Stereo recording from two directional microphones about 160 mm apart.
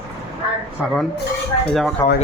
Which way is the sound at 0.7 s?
Centre (ahead or behind).